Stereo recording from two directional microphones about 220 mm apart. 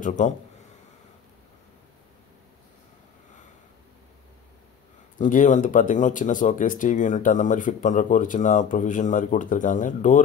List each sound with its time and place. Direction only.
0.2 s speech: 35° left (ahead or behind)
5.2 s speech: 35° left (ahead or behind)